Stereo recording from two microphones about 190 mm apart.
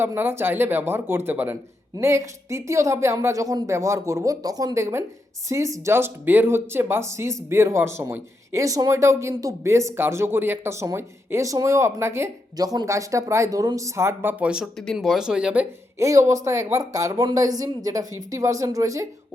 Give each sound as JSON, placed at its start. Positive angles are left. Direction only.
{"t": 0.0, "sound": "speech", "side_deg": -10}